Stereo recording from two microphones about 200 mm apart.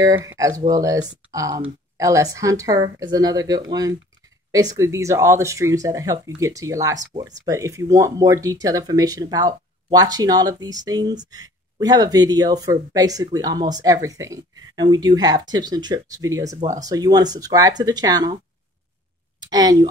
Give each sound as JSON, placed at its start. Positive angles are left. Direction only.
{"t": 0.0, "sound": "speech", "side_deg": -15}
{"t": 16.5, "sound": "speech", "side_deg": -40}
{"t": 16.8, "sound": "speech", "side_deg": -20}
{"t": 19.4, "sound": "speech", "side_deg": -20}